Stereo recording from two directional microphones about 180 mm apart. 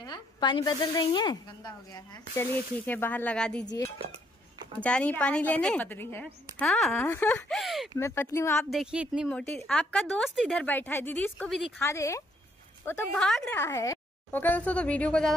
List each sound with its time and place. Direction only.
0.0 s a woman's voice: 25° left (ahead or behind)
2.9 s speech: 10° left (ahead or behind)
3.6 s speech: 20° left (ahead or behind)
4.7 s speech: 5° left (ahead or behind)
8.0 s speech: 15° left (ahead or behind)
8.6 s a woman's voice: 5° right (ahead or behind)
11.8 s speech: 15° left (ahead or behind)
13.1 s a woman's voice: 5° left (ahead or behind)
13.5 s speech: 15° left (ahead or behind)